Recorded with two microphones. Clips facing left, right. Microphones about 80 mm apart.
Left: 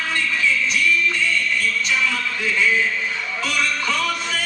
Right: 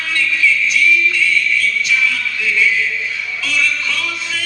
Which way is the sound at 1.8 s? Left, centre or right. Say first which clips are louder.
Right 3 dB; left.